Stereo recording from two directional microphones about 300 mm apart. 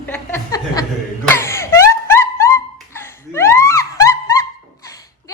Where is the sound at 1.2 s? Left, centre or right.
Centre.